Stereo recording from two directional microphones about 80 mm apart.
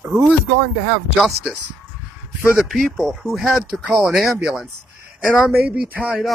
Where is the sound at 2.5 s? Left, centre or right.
Centre.